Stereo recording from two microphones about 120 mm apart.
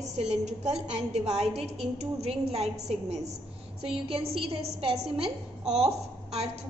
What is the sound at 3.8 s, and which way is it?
A woman's voice, 50° right (ahead or behind).